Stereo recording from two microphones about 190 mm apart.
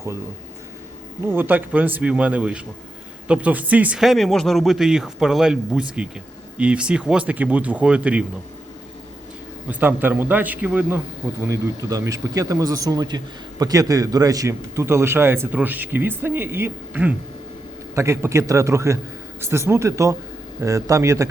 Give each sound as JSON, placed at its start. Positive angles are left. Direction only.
{"t": 1.3, "sound": "speech", "side_deg": -10}
{"t": 9.6, "sound": "speech", "side_deg": -10}